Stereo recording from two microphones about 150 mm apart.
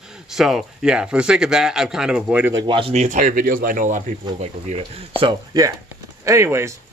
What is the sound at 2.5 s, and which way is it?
Speech, 30° right (ahead or behind).